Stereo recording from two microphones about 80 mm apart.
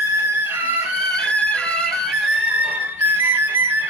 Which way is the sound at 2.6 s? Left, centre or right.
Right.